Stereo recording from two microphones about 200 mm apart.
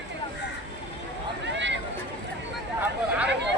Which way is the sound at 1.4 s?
60° right (ahead or behind).